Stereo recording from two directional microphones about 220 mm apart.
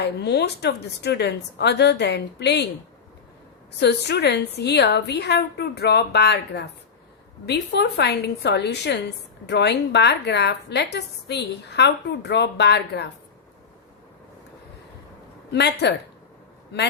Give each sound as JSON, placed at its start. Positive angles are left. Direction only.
{"t": 0.0, "sound": "a woman's voice", "side_deg": 50}
{"t": 3.8, "sound": "a woman's voice", "side_deg": 50}
{"t": 15.5, "sound": "a woman's voice", "side_deg": 50}